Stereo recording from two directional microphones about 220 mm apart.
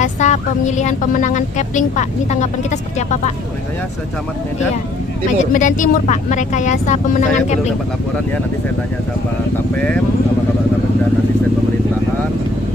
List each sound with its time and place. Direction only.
0.0 s speech: 30° left (ahead or behind)
5.4 s speech: 35° left (ahead or behind)